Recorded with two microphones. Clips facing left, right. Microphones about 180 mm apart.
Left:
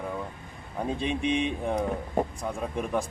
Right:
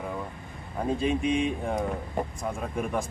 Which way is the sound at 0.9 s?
Centre (ahead or behind).